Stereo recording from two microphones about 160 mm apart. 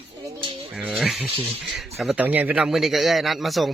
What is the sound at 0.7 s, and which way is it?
A man's voice, 5° right (ahead or behind).